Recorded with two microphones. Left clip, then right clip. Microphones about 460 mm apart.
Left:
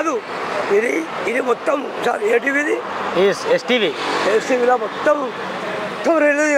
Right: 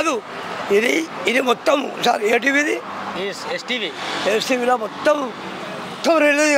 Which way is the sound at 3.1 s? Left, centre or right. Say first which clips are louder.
Left 12 dB; centre.